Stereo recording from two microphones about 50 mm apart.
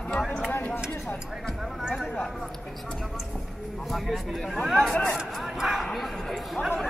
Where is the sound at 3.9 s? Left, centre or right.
Centre.